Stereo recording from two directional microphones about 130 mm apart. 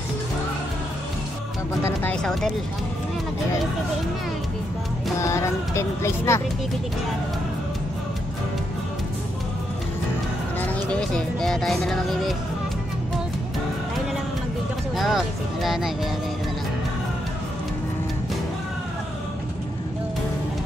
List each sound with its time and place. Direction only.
1.8 s speech: 20° left (ahead or behind)
5.2 s speech: 25° left (ahead or behind)
10.6 s speech: 10° left (ahead or behind)
15.0 s speech: centre (ahead or behind)